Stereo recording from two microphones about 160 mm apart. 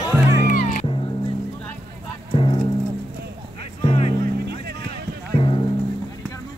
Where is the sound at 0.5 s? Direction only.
50° left (ahead or behind).